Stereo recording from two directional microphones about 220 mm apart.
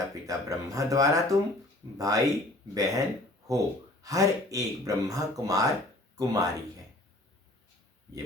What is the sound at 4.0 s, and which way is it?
Speech, 15° right (ahead or behind).